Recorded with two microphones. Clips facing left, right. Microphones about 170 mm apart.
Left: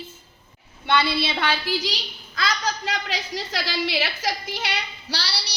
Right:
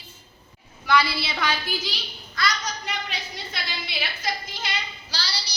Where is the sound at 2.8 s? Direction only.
90° left.